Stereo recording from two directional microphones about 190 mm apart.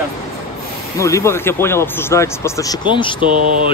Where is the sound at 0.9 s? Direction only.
15° left (ahead or behind).